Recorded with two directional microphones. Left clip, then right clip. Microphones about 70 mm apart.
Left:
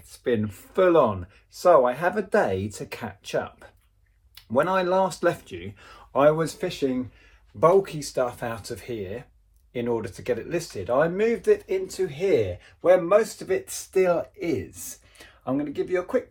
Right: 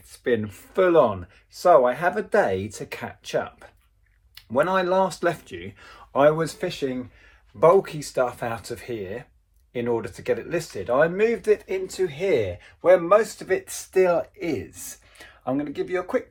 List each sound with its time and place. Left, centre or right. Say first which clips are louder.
0.1 s speech: right 2 dB; right
2.0 s speech: right 1 dB; right
7.6 s speech: right 2 dB; right
9.7 s speech: right 2 dB; right